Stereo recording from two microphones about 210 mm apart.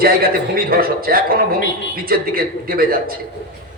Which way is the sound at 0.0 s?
45° right (ahead or behind).